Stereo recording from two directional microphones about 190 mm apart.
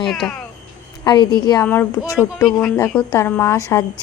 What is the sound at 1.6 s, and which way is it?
Speech, 10° left (ahead or behind).